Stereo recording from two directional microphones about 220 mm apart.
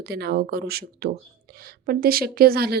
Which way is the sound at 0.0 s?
45° right (ahead or behind).